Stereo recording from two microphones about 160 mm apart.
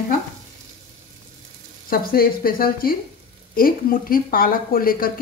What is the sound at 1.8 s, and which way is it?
Speech, 65° left (ahead or behind).